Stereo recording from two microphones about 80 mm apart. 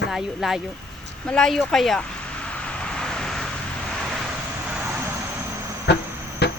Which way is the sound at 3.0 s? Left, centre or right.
Centre.